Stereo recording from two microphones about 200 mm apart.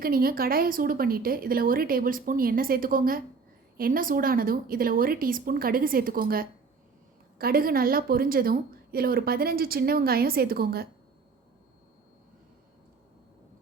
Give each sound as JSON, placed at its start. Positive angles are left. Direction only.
{"t": 0.0, "sound": "a woman's voice", "side_deg": -45}